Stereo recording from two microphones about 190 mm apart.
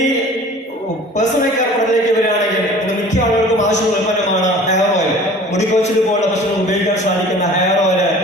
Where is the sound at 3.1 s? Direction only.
40° left (ahead or behind).